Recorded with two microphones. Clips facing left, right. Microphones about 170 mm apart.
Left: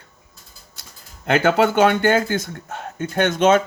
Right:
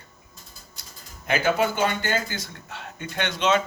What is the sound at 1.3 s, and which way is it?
A man's voice, 70° left (ahead or behind).